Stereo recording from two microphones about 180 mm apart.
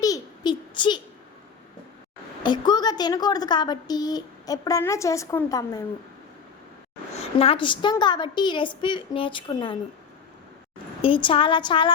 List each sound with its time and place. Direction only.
0.0 s a sound: 20° left (ahead or behind)
2.4 s a woman's voice: 25° left (ahead or behind)
7.2 s a woman's voice: 35° left (ahead or behind)
11.0 s a woman's voice: 30° left (ahead or behind)